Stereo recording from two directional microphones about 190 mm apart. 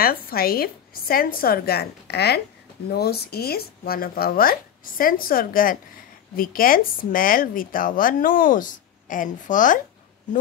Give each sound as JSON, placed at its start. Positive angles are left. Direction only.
{"t": 0.0, "sound": "speech", "side_deg": 50}